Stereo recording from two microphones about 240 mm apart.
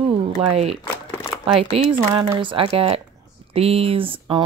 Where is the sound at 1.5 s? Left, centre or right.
Right.